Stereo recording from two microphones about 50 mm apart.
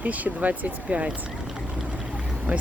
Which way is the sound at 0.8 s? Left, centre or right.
Right.